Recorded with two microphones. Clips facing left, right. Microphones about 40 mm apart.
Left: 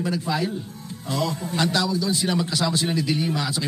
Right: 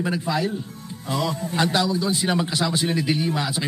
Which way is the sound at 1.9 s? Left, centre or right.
Right.